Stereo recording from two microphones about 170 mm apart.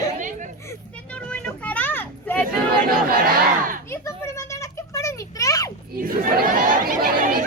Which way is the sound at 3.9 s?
15° left (ahead or behind).